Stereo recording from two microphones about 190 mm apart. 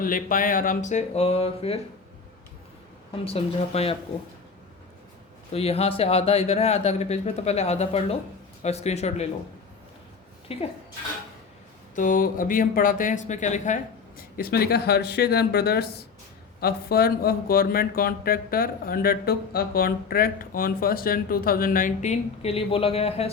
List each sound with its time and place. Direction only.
0.0 s speech: 45° left (ahead or behind); by 1.8 s 30° left (ahead or behind)
3.1 s speech: 30° left (ahead or behind)
5.5 s speech: 30° left (ahead or behind)
10.5 s speech: 30° left (ahead or behind)
11.9 s speech: 45° left (ahead or behind)